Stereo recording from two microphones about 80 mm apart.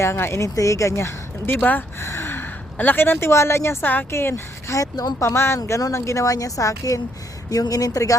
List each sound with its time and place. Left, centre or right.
0.0 s speech: left
1.5 s speech: left
2.0 s gasp: left
2.7 s speech: left
4.8 s speech: left
5.2 s a woman's voice: left